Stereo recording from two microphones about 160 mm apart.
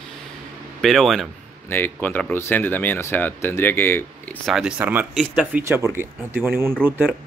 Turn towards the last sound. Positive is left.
turn(degrees=-15)  # may be behind; listen again after turning